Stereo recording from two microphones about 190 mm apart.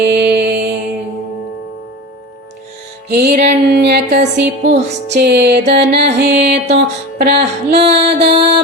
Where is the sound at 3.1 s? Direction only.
50° right (ahead or behind).